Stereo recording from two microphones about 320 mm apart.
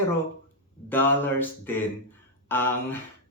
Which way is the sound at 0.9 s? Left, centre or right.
Centre.